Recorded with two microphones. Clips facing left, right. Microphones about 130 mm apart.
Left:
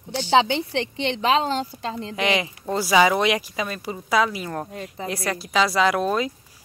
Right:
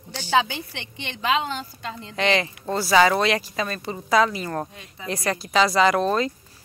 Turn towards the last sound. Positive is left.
turn(degrees=5)  # may be behind; listen again after turning